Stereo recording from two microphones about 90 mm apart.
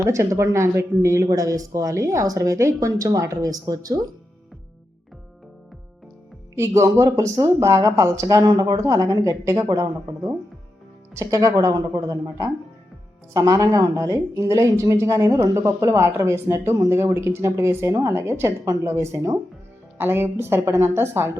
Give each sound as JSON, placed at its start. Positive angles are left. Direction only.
{"t": 0.0, "sound": "speech", "side_deg": -35}
{"t": 6.6, "sound": "speech", "side_deg": -35}
{"t": 8.8, "sound": "speech", "side_deg": -40}
{"t": 11.1, "sound": "speech", "side_deg": -35}
{"t": 13.3, "sound": "a woman's voice", "side_deg": -40}